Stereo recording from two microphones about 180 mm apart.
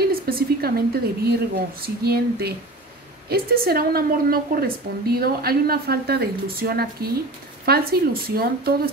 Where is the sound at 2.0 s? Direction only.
60° right (ahead or behind).